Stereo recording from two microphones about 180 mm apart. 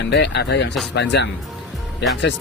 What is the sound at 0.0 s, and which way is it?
Speech, 70° left (ahead or behind).